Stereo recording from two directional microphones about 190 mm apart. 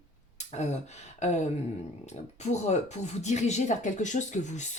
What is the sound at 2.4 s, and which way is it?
Speech, 35° left (ahead or behind).